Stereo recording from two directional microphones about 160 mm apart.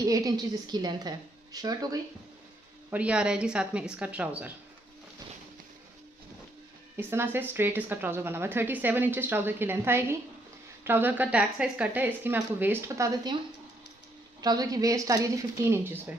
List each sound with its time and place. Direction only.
0.0 s a woman's voice: 20° right (ahead or behind)
2.9 s a woman's voice: 5° right (ahead or behind)
7.0 s a woman's voice: 15° right (ahead or behind)
14.4 s speech: 25° right (ahead or behind)